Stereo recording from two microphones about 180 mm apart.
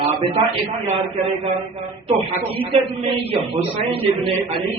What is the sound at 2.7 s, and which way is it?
A man's voice, 30° right (ahead or behind).